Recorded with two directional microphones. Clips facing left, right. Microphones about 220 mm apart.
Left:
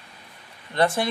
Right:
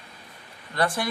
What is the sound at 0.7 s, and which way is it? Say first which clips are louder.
Speech: left 4 dB; 25° left (ahead or behind).